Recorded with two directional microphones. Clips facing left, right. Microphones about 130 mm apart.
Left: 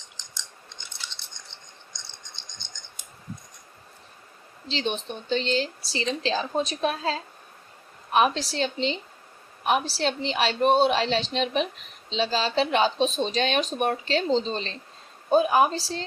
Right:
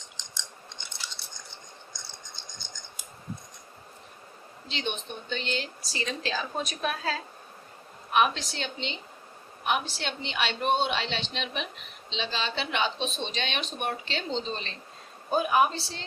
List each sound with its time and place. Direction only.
4.7 s speech: 30° left (ahead or behind)